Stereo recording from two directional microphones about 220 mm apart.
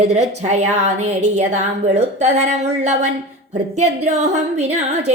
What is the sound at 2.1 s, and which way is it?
A woman's voice, 30° right (ahead or behind).